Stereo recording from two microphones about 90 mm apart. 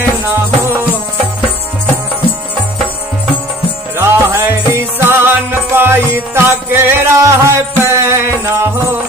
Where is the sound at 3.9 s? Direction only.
30° right (ahead or behind).